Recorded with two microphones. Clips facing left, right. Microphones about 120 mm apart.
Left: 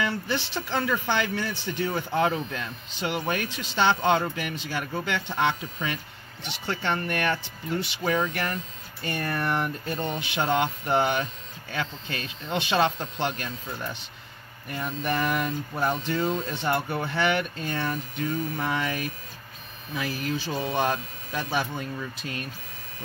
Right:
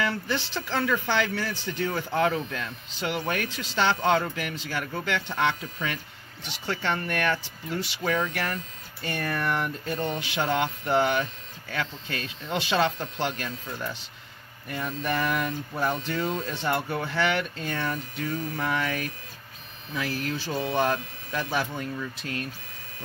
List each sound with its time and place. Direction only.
0.0 s a man's voice: centre (ahead or behind)